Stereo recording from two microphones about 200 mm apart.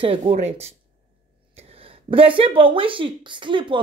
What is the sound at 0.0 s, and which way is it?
Speech, 30° right (ahead or behind).